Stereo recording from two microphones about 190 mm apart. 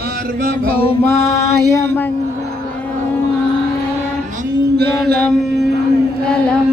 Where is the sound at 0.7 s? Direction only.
30° left (ahead or behind).